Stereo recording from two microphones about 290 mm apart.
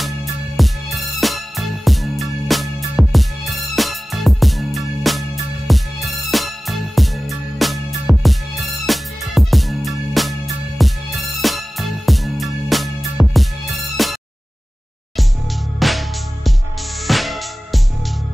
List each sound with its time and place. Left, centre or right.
0.0 s music: centre
15.8 s music: centre